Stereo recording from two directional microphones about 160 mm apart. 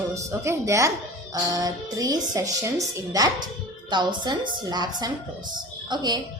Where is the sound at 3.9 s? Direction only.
30° right (ahead or behind).